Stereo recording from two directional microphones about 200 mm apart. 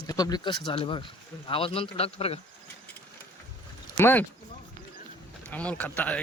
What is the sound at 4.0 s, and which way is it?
Speech, 10° left (ahead or behind).